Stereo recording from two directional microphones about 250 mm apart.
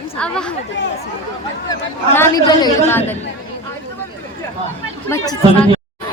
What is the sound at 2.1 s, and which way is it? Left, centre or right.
Speech, centre.